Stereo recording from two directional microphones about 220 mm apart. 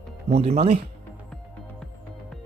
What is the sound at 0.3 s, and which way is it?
Speech, 30° right (ahead or behind).